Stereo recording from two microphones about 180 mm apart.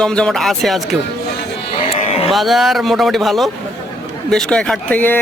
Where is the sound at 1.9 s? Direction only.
35° left (ahead or behind).